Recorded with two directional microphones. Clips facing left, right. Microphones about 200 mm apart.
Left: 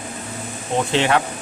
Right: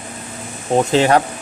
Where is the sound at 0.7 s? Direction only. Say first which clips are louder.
Right 5 dB; 40° right (ahead or behind).